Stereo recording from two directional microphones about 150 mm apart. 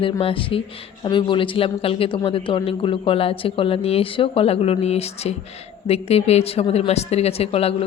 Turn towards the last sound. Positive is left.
turn(degrees=40)  # may be behind; listen again after turning